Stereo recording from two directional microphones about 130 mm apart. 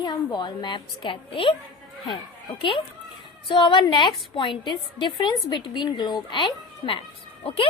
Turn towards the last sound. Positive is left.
turn(degrees=45)  # may be behind; listen again after turning